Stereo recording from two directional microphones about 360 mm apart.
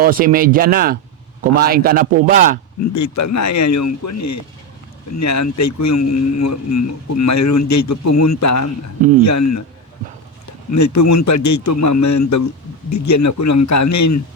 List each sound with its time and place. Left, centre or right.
0.0 s a man's voice: right
2.9 s speech: left
10.7 s speech: left